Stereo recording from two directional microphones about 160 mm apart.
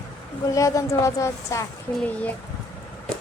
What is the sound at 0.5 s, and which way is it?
A woman's voice, 20° left (ahead or behind).